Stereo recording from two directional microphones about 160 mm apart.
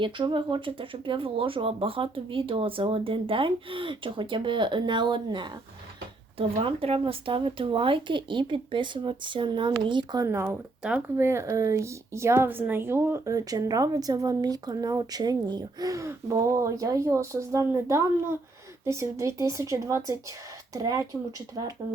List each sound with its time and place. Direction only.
0.0 s speech: 30° right (ahead or behind)
10.2 s speech: 10° right (ahead or behind)